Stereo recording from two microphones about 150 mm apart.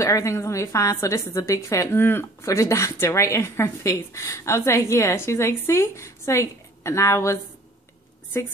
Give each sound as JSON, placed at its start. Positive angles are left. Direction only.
{"t": 0.0, "sound": "a woman's voice", "side_deg": 20}